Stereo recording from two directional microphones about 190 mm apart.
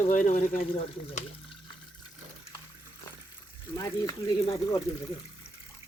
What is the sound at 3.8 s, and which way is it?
Speech, 20° left (ahead or behind).